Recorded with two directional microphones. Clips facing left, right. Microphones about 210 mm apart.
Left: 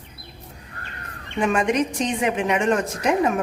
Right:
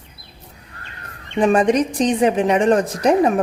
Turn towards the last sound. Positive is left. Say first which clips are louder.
# right 5 dB
turn(degrees=-35)  # may be behind; listen again after turning